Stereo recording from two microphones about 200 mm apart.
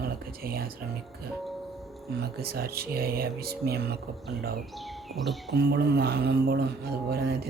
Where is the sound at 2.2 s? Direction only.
50° right (ahead or behind).